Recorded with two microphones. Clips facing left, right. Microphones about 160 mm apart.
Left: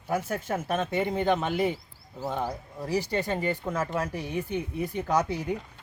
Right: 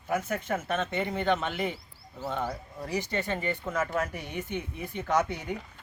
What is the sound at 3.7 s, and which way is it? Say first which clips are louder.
Speech: even; 30° left (ahead or behind).